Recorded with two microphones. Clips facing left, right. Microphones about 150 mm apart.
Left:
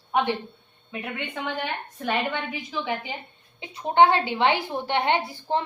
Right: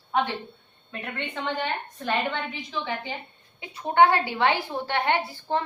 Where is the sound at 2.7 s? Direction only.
10° left (ahead or behind).